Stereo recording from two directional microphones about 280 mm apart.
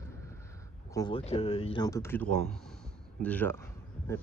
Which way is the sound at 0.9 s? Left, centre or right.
Centre.